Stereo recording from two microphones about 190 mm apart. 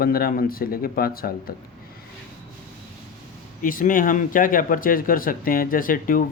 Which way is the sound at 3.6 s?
45° left (ahead or behind).